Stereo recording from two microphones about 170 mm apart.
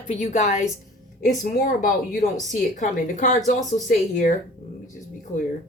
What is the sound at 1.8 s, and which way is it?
Speech, 45° left (ahead or behind).